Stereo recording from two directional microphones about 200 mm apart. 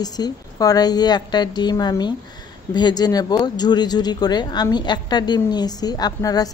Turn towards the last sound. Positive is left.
turn(degrees=20)  # may be behind; listen again after turning